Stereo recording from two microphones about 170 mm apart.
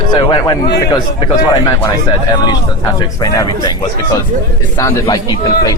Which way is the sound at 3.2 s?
20° left (ahead or behind).